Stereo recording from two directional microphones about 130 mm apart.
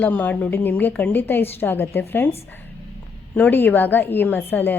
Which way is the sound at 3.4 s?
15° left (ahead or behind).